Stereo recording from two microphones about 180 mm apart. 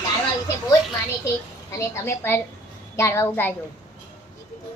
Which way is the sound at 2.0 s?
15° left (ahead or behind).